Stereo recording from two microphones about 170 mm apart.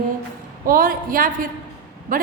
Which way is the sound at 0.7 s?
55° right (ahead or behind).